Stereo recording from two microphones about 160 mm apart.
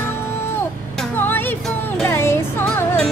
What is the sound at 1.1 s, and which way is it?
Music, 15° left (ahead or behind).